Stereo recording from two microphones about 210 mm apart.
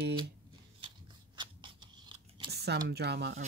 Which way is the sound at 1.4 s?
20° right (ahead or behind).